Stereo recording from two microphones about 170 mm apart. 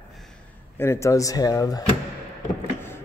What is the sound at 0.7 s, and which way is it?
Speech, 15° left (ahead or behind).